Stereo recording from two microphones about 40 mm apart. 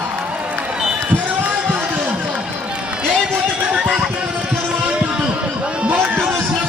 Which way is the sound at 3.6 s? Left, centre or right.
Right.